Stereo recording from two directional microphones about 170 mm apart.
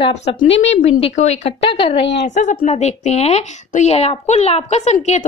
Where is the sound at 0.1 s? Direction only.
40° left (ahead or behind).